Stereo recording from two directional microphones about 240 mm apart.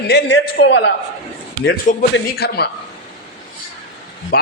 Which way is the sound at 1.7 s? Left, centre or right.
Left.